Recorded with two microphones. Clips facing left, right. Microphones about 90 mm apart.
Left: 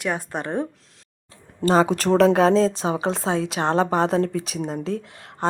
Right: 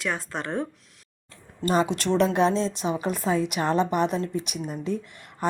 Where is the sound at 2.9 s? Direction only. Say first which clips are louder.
Left 2 dB; 90° left.